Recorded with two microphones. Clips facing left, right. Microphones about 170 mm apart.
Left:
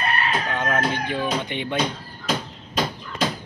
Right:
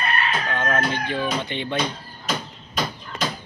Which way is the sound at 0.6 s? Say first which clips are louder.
Right 1 dB; 15° left (ahead or behind).